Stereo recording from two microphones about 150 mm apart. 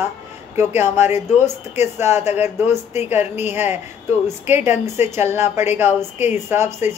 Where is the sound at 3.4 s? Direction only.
15° right (ahead or behind).